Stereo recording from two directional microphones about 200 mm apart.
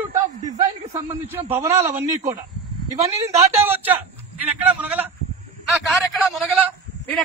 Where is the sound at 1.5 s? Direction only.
15° right (ahead or behind).